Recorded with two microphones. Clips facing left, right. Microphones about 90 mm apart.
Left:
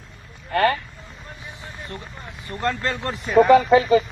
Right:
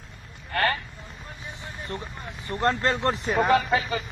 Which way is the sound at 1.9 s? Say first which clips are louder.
Right 1 dB; 25° right (ahead or behind).